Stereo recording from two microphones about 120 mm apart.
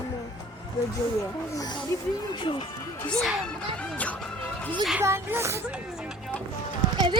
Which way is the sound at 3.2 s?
Centre (ahead or behind).